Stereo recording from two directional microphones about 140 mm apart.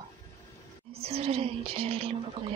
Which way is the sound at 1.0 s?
45° right (ahead or behind).